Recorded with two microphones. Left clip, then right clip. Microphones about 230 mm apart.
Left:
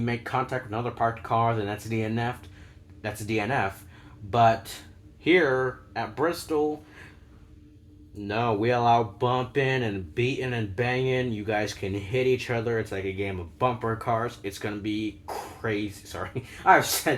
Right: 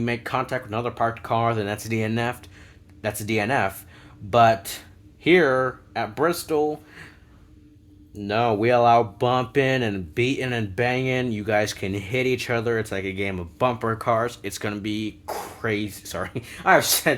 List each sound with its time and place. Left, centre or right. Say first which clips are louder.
0.0 s speech: right 3 dB; right
8.3 s speech: right 5 dB; right